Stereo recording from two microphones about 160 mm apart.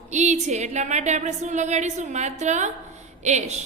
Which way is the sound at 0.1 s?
45° right (ahead or behind).